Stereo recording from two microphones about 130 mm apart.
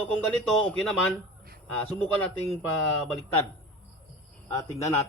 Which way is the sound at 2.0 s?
10° left (ahead or behind).